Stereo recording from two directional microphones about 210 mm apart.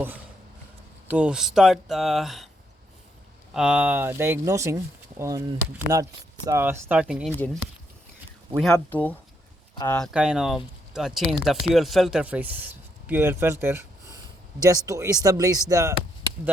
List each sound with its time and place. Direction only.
1.0 s speech: 5° right (ahead or behind)
3.5 s speech: 5° right (ahead or behind)
5.9 s speech: 15° right (ahead or behind)
7.3 s speech: 10° left (ahead or behind)
8.7 s speech: 10° left (ahead or behind); by 16.0 s 15° right (ahead or behind)